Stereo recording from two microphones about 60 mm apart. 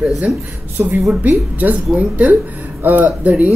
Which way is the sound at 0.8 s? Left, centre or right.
Right.